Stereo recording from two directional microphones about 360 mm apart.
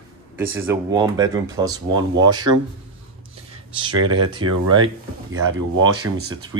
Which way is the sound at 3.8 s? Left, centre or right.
Centre.